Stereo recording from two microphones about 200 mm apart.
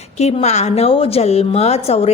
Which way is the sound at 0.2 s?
30° left (ahead or behind).